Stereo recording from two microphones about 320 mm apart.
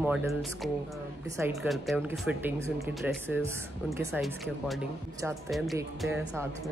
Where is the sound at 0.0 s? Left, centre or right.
Centre.